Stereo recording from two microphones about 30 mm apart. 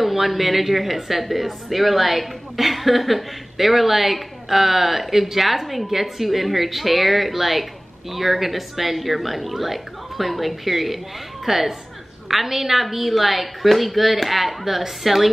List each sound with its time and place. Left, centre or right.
0.0 s a woman's voice: centre